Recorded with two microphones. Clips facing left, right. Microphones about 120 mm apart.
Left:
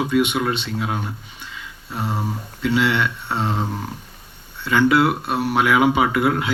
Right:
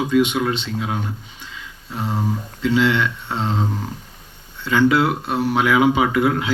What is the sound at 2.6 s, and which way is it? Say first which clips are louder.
Speech: right 2 dB; 60° left (ahead or behind).